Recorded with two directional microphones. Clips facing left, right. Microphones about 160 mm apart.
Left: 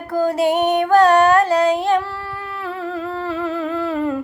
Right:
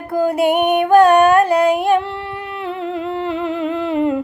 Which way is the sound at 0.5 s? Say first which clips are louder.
Right 2 dB; 15° right (ahead or behind).